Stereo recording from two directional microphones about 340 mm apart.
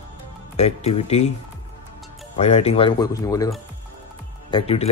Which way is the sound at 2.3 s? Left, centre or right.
Centre.